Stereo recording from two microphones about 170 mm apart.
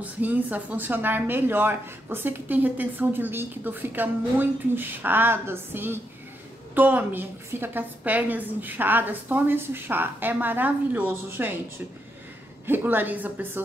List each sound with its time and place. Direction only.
0.0 s speech: 10° right (ahead or behind)
12.6 s speech: 10° right (ahead or behind)